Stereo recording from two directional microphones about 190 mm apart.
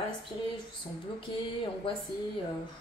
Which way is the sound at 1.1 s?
25° left (ahead or behind).